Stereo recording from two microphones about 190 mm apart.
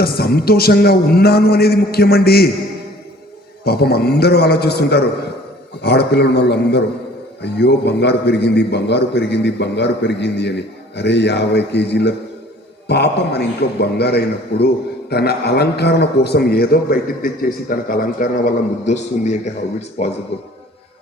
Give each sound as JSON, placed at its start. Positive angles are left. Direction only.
{"t": 0.0, "sound": "a man's voice", "side_deg": 55}
{"t": 3.6, "sound": "a man's voice", "side_deg": 55}